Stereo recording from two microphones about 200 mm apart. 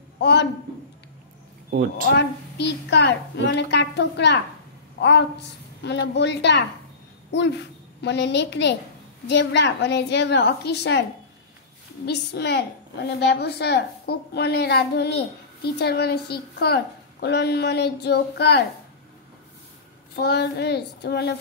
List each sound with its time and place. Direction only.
0.2 s a man's voice: 60° left (ahead or behind)
1.7 s speech: 45° right (ahead or behind)
2.1 s a woman's voice: 60° left (ahead or behind)
12.1 s a woman's voice: 55° left (ahead or behind)
20.2 s a woman's voice: 55° left (ahead or behind)